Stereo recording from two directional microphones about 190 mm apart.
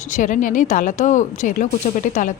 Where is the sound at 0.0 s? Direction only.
40° left (ahead or behind).